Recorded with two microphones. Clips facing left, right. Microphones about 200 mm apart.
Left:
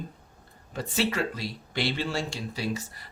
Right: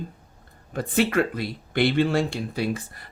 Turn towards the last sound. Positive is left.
turn(degrees=-55)  # may be behind; listen again after turning